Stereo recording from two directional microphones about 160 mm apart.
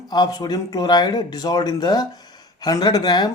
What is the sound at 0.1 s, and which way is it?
Speech, 25° left (ahead or behind).